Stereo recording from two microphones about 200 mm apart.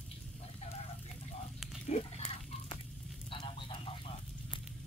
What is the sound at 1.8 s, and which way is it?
Pig, 35° left (ahead or behind).